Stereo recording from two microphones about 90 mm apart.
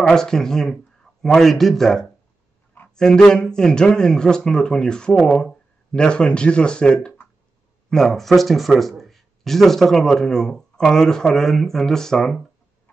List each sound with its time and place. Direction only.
0.0 s speech: 5° left (ahead or behind)